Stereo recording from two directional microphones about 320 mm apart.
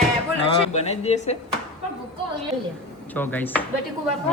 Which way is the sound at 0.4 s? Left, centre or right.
Centre.